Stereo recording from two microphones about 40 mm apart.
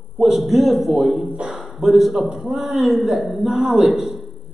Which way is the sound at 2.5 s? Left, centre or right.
Centre.